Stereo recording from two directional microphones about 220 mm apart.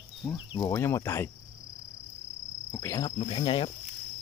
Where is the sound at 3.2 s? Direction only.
25° left (ahead or behind).